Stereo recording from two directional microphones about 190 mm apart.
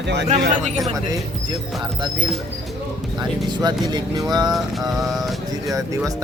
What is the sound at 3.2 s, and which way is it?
Speech, 20° right (ahead or behind).